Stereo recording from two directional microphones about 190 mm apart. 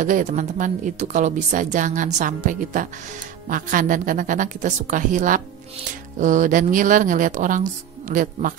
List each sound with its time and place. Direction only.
0.0 s a woman's voice: 40° right (ahead or behind)